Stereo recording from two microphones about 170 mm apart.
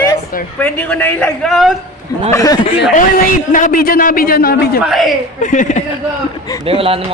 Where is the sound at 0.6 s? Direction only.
10° left (ahead or behind).